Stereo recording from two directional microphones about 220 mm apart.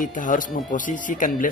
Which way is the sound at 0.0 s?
35° left (ahead or behind).